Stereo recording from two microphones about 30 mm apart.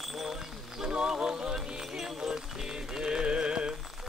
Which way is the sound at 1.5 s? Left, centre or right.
Centre.